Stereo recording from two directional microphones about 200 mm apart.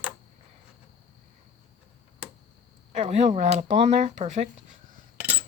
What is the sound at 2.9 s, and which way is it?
Speech, 35° right (ahead or behind).